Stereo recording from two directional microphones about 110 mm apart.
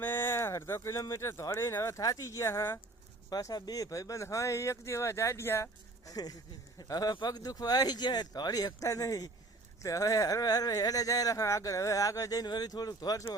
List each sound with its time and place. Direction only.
0.0 s speech: 20° left (ahead or behind)
3.2 s speech: 35° left (ahead or behind)
6.1 s speech: 35° left (ahead or behind)